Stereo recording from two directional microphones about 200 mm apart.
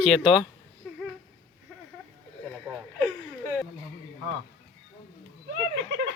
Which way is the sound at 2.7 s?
5° right (ahead or behind).